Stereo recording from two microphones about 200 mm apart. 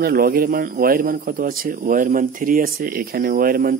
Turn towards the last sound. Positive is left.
turn(degrees=-45)  # may be behind; listen again after turning